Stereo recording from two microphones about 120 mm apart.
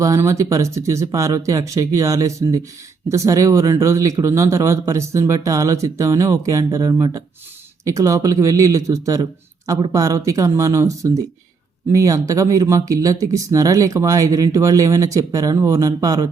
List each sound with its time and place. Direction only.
0.0 s speech: 25° right (ahead or behind)